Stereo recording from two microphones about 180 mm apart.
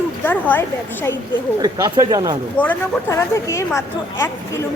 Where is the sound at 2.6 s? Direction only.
10° left (ahead or behind).